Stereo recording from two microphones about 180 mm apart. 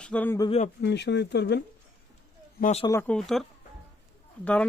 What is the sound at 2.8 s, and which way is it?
Speech, 15° left (ahead or behind).